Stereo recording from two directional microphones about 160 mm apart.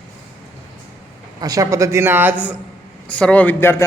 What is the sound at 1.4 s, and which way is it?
Speech, 20° right (ahead or behind).